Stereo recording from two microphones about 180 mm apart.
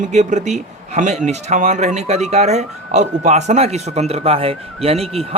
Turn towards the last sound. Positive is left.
turn(degrees=-35)  # may be behind; listen again after turning